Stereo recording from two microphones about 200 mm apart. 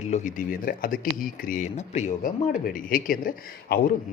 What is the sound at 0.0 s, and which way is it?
A man's voice, 35° left (ahead or behind).